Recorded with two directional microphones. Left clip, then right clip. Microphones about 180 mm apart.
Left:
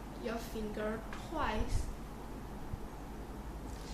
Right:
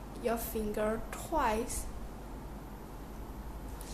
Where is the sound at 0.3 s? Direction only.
55° right (ahead or behind).